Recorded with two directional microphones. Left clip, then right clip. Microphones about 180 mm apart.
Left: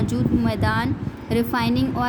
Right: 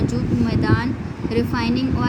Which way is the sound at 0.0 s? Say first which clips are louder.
Even; 50° left (ahead or behind).